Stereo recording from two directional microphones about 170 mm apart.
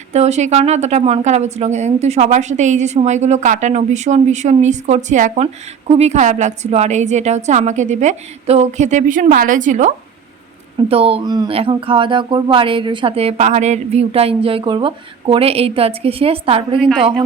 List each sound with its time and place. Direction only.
0.1 s a woman's voice: 40° right (ahead or behind)
10.8 s speech: 35° right (ahead or behind)
16.8 s a woman's voice: 5° right (ahead or behind)